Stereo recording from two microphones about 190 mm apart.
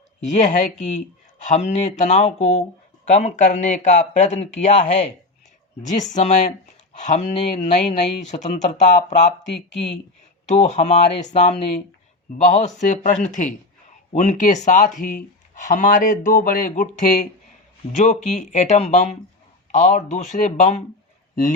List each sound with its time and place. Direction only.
0.3 s speech: 40° left (ahead or behind)
10.4 s speech: 35° left (ahead or behind)